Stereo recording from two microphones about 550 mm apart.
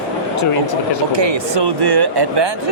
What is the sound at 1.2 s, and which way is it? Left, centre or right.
Speech, right.